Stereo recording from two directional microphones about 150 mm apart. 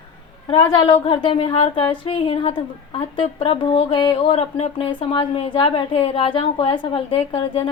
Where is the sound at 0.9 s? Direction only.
35° left (ahead or behind).